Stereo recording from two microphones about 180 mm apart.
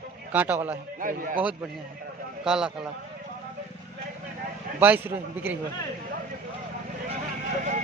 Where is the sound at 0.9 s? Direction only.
50° right (ahead or behind).